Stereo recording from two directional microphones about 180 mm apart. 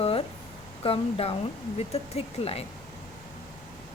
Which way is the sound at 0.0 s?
30° left (ahead or behind).